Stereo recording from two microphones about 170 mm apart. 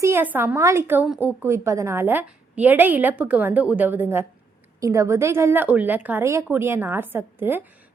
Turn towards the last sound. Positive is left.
turn(degrees=-10)  # may be behind; listen again after turning